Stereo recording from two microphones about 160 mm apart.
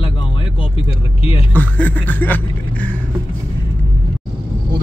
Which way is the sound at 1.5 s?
10° left (ahead or behind).